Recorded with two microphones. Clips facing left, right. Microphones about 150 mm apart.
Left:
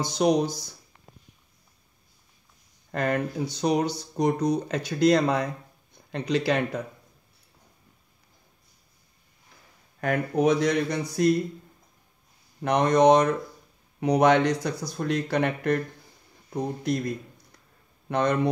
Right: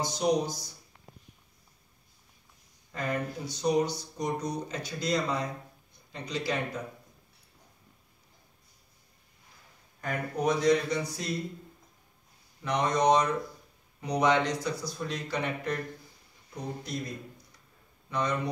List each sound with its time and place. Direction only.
0.2 s speech: 90° left
2.9 s speech: 70° left (ahead or behind)
9.9 s speech: 70° left (ahead or behind)
12.6 s speech: 65° left (ahead or behind)